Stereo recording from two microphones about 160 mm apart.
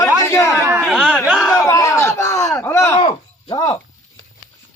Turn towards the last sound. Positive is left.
turn(degrees=30)  # may be behind; listen again after turning